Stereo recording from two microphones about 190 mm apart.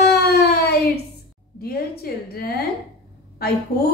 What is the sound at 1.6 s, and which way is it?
Speech, 55° left (ahead or behind).